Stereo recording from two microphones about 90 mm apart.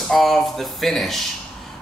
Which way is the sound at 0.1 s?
5° left (ahead or behind).